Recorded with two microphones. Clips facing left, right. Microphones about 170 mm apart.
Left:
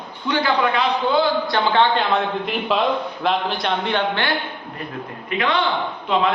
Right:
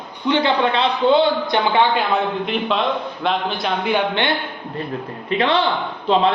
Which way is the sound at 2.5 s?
5° left (ahead or behind).